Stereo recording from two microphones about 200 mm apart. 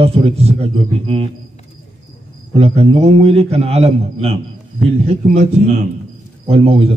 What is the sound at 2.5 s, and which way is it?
A man's voice, 30° right (ahead or behind).